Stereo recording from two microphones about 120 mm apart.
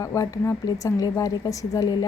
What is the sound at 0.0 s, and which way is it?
Speech, 25° left (ahead or behind).